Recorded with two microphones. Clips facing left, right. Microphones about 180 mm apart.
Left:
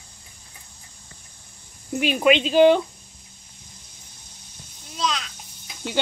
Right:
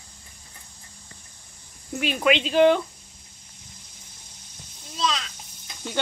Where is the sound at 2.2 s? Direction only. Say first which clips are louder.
Left 3 dB; 20° left (ahead or behind).